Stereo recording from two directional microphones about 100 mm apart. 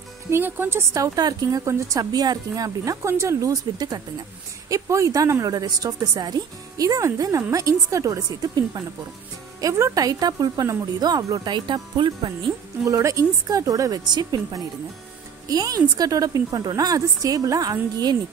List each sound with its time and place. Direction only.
0.3 s a woman's voice: 20° right (ahead or behind); by 12.1 s 50° right (ahead or behind)
12.8 s a woman's voice: 30° right (ahead or behind)